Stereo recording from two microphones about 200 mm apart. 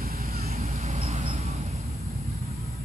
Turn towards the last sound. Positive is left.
turn(degrees=-35)  # may be behind; listen again after turning